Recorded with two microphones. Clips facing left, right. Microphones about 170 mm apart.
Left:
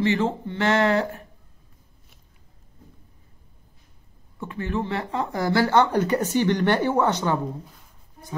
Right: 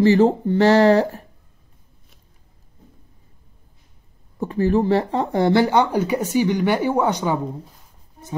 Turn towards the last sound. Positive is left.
turn(degrees=-10)  # may be behind; listen again after turning